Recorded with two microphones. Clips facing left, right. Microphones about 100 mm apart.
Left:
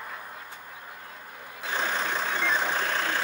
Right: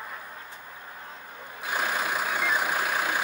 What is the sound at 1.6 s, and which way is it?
Vehicle, 10° right (ahead or behind).